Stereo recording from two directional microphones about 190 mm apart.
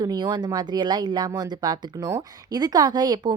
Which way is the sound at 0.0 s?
20° right (ahead or behind).